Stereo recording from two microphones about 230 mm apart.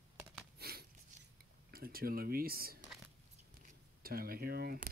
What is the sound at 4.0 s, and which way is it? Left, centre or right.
Speech, right.